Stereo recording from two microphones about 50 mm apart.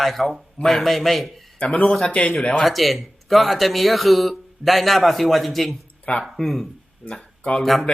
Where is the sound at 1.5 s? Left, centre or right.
Left.